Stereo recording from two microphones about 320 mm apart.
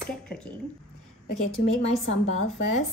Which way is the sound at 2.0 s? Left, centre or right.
Left.